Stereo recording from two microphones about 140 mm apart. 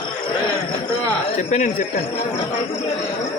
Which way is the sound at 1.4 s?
60° left (ahead or behind).